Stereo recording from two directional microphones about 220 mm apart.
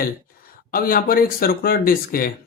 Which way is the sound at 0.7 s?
40° left (ahead or behind).